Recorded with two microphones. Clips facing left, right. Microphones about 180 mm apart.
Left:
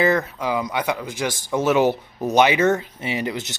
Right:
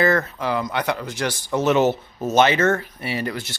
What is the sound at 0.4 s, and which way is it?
Speech, 10° left (ahead or behind).